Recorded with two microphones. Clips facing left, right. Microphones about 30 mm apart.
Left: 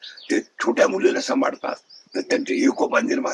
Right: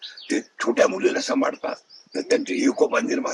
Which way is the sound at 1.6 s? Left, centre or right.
Centre.